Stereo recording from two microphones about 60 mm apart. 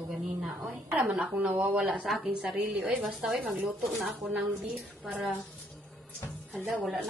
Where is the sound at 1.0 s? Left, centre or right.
Right.